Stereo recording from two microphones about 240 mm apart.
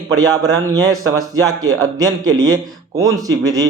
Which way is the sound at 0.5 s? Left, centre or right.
Centre.